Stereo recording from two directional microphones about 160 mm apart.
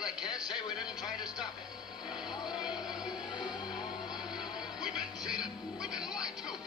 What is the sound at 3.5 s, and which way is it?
Music, 25° left (ahead or behind).